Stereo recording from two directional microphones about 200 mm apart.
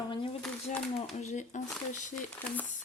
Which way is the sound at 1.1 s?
35° left (ahead or behind).